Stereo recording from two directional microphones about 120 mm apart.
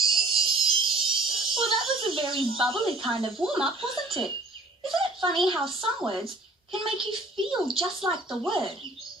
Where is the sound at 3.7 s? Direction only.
45° right (ahead or behind).